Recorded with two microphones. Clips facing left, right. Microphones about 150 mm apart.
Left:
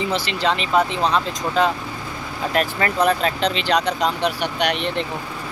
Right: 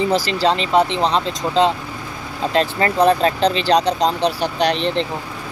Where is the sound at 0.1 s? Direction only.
35° right (ahead or behind).